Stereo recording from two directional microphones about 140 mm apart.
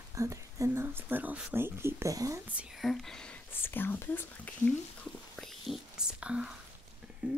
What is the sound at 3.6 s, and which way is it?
Speech, 15° left (ahead or behind).